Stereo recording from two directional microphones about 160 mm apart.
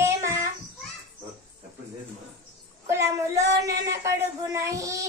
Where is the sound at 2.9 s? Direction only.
15° right (ahead or behind).